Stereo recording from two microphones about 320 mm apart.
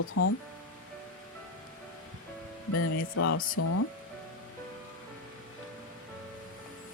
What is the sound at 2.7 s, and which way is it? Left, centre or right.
Speech, left.